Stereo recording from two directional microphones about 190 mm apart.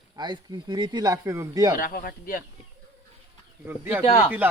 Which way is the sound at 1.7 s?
45° left (ahead or behind).